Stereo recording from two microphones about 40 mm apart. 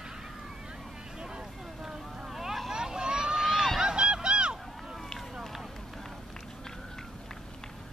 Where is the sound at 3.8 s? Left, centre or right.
Right.